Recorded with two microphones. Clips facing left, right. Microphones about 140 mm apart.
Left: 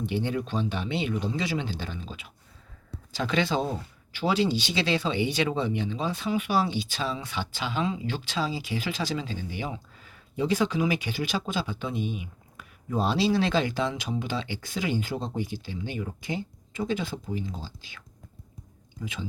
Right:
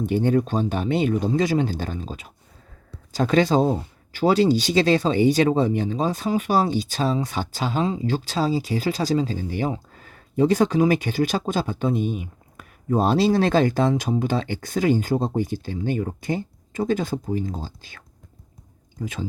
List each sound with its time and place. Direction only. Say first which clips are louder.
0.0 s speech: right 8 dB; 45° right (ahead or behind)